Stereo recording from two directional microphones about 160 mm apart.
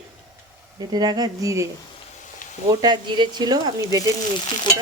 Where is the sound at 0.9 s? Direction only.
25° right (ahead or behind).